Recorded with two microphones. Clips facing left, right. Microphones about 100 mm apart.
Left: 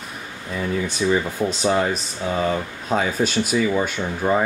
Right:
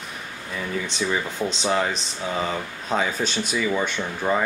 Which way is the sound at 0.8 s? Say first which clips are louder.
Left 6 dB; 10° left (ahead or behind).